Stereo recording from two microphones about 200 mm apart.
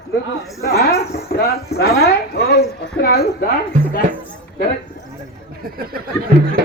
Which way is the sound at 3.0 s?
50° left (ahead or behind).